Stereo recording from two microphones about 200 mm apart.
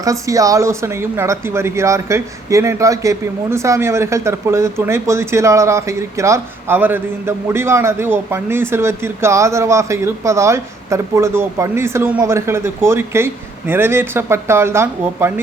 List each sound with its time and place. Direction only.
0.0 s speech: 15° right (ahead or behind)